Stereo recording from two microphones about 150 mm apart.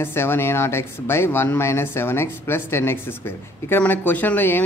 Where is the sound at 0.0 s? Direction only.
15° left (ahead or behind).